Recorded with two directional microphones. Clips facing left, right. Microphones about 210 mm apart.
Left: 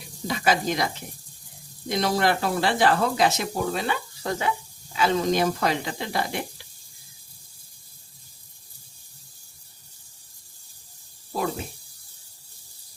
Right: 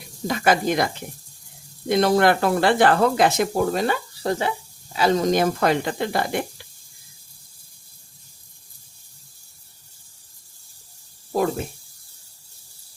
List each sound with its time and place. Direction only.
0.3 s speech: 55° right (ahead or behind)
1.9 s speech: 55° right (ahead or behind)